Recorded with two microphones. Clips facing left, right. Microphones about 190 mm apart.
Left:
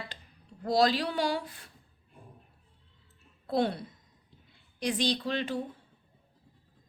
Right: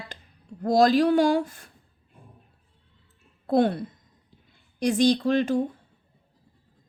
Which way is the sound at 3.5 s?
50° right (ahead or behind).